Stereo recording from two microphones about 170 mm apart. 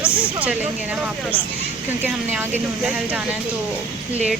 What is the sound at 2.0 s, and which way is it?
Speech, 10° right (ahead or behind).